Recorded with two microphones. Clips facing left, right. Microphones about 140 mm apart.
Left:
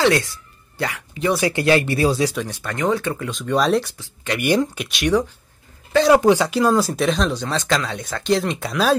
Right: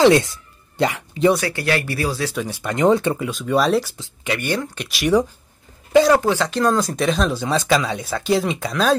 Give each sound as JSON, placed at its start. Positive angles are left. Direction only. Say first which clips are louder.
{"t": 0.0, "sound": "speech", "louder": "right 5 dB", "side_deg": -20}
{"t": 1.4, "sound": "speech", "louder": "left 5 dB", "side_deg": 20}
{"t": 2.4, "sound": "speech", "louder": "right 5 dB", "side_deg": -15}
{"t": 3.2, "sound": "speech", "louder": "right 1 dB", "side_deg": -5}
{"t": 4.4, "sound": "speech", "louder": "left 9 dB", "side_deg": 15}
{"t": 4.8, "sound": "speech", "louder": "even", "side_deg": 0}
{"t": 6.1, "sound": "speech", "louder": "left 3 dB", "side_deg": 15}